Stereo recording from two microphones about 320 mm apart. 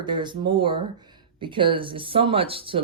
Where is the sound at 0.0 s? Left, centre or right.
Centre.